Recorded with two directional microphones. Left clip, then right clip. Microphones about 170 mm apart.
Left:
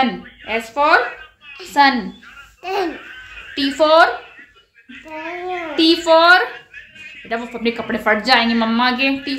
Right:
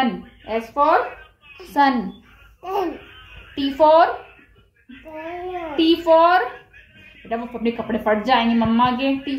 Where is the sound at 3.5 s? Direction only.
40° left (ahead or behind).